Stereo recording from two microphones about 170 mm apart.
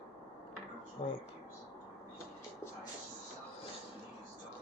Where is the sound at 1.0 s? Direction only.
35° left (ahead or behind).